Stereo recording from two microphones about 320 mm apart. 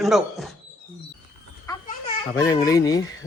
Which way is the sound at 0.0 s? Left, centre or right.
Centre.